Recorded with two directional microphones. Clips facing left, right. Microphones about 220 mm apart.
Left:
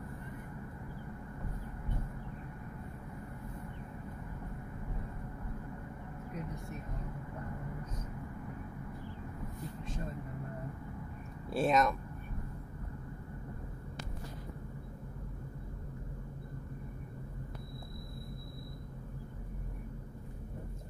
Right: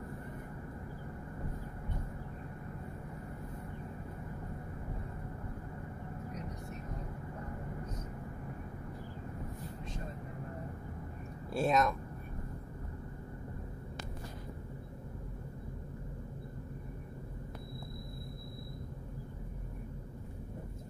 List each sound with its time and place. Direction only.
11.5 s speech: centre (ahead or behind)